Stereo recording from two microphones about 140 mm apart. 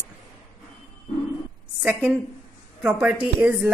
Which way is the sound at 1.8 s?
10° right (ahead or behind).